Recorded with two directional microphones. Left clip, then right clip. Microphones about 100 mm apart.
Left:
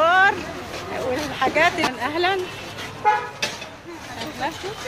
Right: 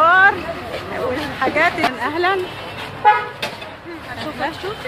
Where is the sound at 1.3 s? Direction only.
25° left (ahead or behind).